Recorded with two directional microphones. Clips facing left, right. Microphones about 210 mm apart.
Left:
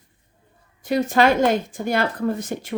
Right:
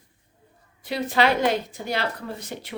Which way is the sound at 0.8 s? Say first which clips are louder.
Left 5 dB; 45° left (ahead or behind).